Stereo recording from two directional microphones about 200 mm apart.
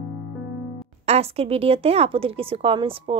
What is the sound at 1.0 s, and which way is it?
Speech, 30° right (ahead or behind).